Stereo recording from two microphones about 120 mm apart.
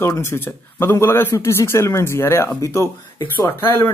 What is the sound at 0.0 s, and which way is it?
Speech, 20° left (ahead or behind).